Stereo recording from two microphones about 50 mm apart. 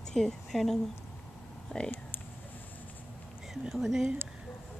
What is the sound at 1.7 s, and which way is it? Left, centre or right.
Speech, left.